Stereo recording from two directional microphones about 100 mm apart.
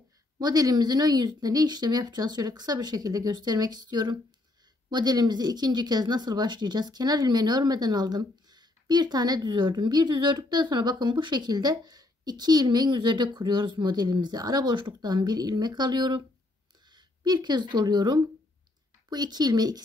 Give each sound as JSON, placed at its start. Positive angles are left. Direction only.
{"t": 0.4, "sound": "speech", "side_deg": -40}